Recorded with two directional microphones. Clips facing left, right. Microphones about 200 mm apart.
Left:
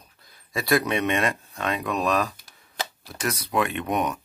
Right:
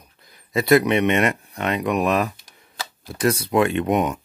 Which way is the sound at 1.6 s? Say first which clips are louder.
Right 5 dB; 20° right (ahead or behind).